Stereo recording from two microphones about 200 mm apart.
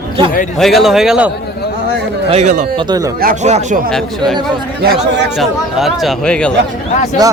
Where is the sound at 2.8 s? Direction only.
20° right (ahead or behind).